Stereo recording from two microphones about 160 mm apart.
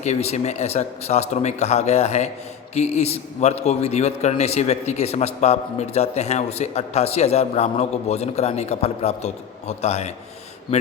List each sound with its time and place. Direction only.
0.0 s a man's voice: 45° left (ahead or behind)